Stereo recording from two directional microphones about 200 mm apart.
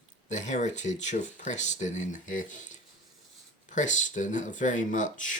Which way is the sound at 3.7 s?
40° left (ahead or behind).